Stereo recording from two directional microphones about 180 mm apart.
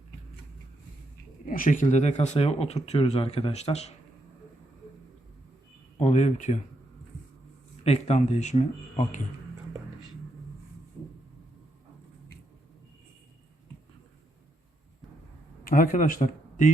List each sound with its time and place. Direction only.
1.5 s speech: 50° left (ahead or behind)
6.0 s speech: 40° left (ahead or behind)
7.9 s speech: 35° left (ahead or behind)
15.7 s speech: 50° left (ahead or behind)